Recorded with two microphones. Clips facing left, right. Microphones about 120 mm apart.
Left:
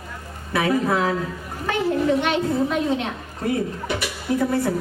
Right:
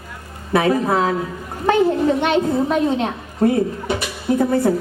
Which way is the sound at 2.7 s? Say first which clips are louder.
Right 4 dB; 35° right (ahead or behind).